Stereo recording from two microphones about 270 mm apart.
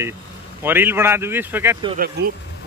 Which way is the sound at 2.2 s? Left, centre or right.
Right.